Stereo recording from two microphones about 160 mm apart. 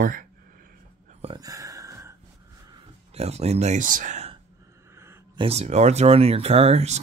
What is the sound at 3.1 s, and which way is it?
Speech, 40° right (ahead or behind).